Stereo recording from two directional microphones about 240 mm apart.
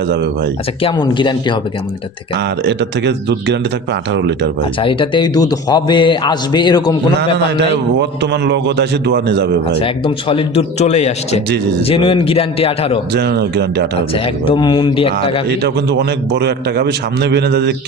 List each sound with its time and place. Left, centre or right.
0.1 s a man's voice: right
0.8 s speech: left
2.3 s a man's voice: right
4.8 s a man's voice: left
8.2 s a man's voice: right
9.7 s speech: left
13.1 s a man's voice: right
14.1 s speech: left
15.6 s a man's voice: right